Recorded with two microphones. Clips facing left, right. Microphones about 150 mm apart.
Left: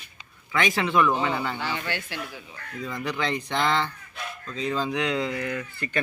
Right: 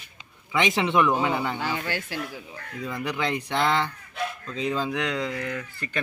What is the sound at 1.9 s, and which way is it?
Speech, 40° right (ahead or behind).